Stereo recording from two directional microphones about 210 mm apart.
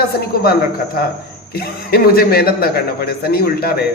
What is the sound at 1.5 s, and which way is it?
A man's voice, 45° left (ahead or behind).